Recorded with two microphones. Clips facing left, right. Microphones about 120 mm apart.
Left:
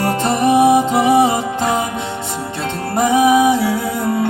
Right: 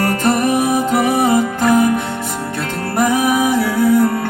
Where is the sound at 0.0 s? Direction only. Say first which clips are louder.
Even; 25° left (ahead or behind).